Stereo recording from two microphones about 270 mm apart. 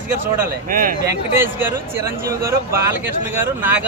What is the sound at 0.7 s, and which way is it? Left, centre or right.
Speech, right.